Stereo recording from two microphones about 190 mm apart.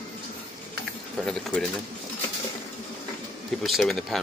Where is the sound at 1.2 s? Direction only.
5° left (ahead or behind).